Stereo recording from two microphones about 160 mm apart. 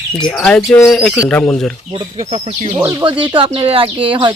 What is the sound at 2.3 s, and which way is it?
Speech, 40° right (ahead or behind).